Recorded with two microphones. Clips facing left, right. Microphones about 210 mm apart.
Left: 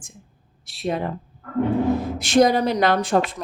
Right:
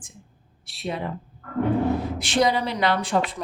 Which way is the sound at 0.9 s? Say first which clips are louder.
Left 5 dB; 50° left (ahead or behind).